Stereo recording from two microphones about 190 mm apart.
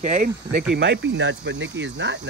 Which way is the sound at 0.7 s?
65° right (ahead or behind).